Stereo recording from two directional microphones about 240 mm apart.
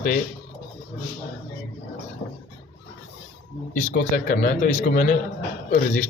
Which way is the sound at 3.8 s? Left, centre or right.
Left.